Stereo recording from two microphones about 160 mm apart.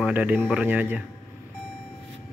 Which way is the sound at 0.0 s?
10° right (ahead or behind).